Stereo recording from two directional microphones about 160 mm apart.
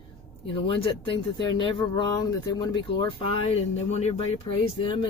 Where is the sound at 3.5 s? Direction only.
40° left (ahead or behind).